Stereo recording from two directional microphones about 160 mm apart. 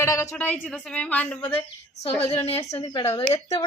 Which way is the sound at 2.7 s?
20° left (ahead or behind).